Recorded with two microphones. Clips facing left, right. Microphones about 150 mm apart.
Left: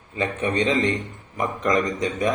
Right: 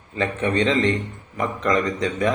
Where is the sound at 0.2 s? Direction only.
15° left (ahead or behind).